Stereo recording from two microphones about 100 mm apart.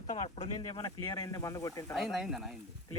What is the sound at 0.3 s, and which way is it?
Speech, 90° left.